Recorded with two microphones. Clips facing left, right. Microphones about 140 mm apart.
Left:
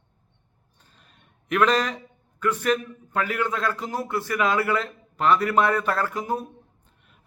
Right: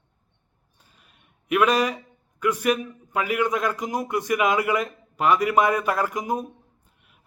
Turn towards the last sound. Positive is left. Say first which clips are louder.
# left 2 dB
turn(degrees=-10)  # may be behind; listen again after turning